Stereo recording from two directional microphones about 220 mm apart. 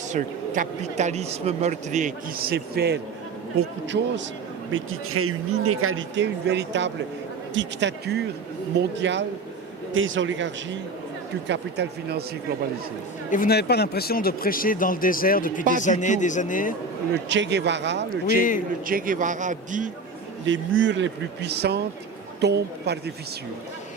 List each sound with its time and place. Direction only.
0.1 s speech: 35° right (ahead or behind); by 4.2 s 55° right (ahead or behind)
4.7 s speech: 70° right (ahead or behind); by 12.2 s 50° right (ahead or behind)
13.3 s speech: 40° left (ahead or behind)
17.2 s speech: 55° right (ahead or behind)
18.3 s speech: 35° left (ahead or behind)
18.9 s speech: 40° right (ahead or behind)
20.4 s speech: 60° right (ahead or behind)